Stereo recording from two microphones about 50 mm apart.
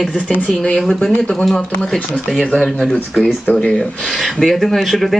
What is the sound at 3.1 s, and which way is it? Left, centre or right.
Speech, left.